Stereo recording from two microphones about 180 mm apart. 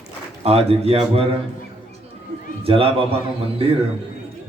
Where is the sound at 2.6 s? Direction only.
30° right (ahead or behind).